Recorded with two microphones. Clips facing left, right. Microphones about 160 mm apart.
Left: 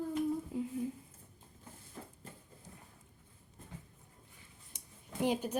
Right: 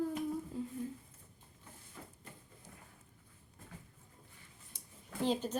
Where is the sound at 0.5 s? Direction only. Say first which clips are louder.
Left 3 dB; 15° left (ahead or behind).